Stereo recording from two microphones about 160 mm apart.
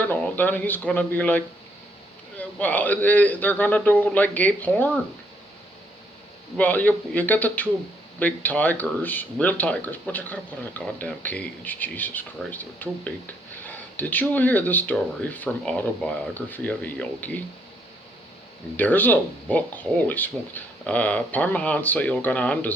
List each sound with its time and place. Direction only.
0.1 s speech: 10° left (ahead or behind)
2.4 s speech: 10° left (ahead or behind)
6.6 s speech: 10° left (ahead or behind)
18.8 s speech: 10° left (ahead or behind)